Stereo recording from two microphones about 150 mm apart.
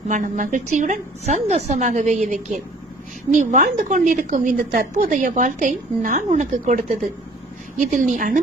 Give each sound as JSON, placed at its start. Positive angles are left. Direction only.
{"t": 0.1, "sound": "a woman's voice", "side_deg": -60}